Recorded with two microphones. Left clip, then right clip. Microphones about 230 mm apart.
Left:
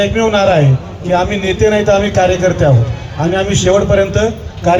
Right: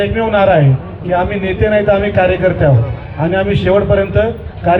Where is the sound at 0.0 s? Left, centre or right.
Left.